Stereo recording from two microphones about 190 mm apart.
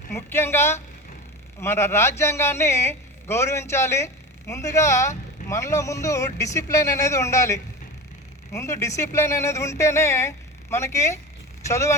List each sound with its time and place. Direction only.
0.1 s a man's voice: 15° left (ahead or behind)